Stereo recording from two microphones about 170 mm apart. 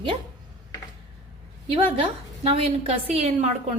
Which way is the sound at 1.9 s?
35° right (ahead or behind).